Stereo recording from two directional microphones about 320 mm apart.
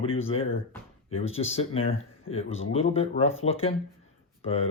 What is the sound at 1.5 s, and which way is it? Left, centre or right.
Speech, centre.